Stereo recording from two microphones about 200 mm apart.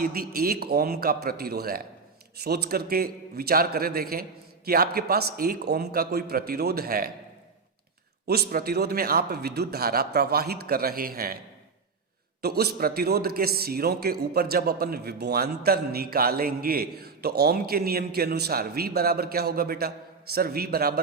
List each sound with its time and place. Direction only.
0.0 s a man's voice: 45° right (ahead or behind)
8.3 s a man's voice: 50° right (ahead or behind)
12.4 s a man's voice: 50° right (ahead or behind)